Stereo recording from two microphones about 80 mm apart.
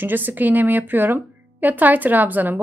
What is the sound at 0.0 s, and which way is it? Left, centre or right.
A woman's voice, right.